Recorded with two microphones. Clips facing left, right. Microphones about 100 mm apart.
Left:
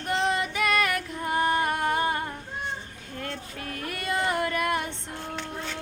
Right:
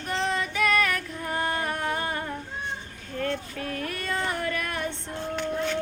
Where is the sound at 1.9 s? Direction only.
25° left (ahead or behind).